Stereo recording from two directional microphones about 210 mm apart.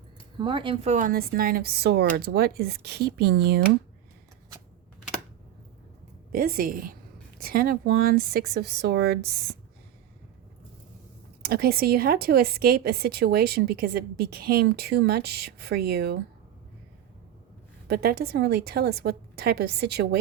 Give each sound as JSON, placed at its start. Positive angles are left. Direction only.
{"t": 0.3, "sound": "a woman's voice", "side_deg": -20}
{"t": 6.3, "sound": "a woman's voice", "side_deg": -45}
{"t": 11.4, "sound": "a woman's voice", "side_deg": -45}
{"t": 17.8, "sound": "a woman's voice", "side_deg": -50}